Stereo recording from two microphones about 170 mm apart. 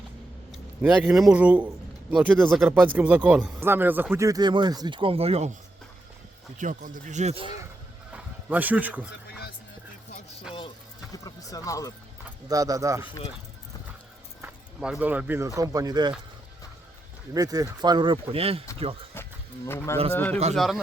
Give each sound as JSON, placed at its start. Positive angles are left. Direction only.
{"t": 0.5, "sound": "speech", "side_deg": -5}
{"t": 6.6, "sound": "speech", "side_deg": -50}
{"t": 8.1, "sound": "speech", "side_deg": -10}
{"t": 11.1, "sound": "speech", "side_deg": 20}
{"t": 12.5, "sound": "speech", "side_deg": -20}
{"t": 14.4, "sound": "speech", "side_deg": -5}
{"t": 17.3, "sound": "speech", "side_deg": -20}
{"t": 19.1, "sound": "a sound", "side_deg": 15}
{"t": 20.1, "sound": "a man's voice", "side_deg": 10}
{"t": 20.6, "sound": "a man's voice", "side_deg": 0}